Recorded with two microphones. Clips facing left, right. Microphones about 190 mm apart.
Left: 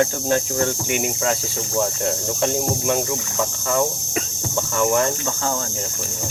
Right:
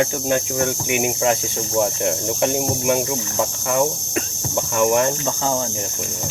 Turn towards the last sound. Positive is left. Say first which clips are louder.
# right 2 dB
turn(degrees=-20)  # may be behind; listen again after turning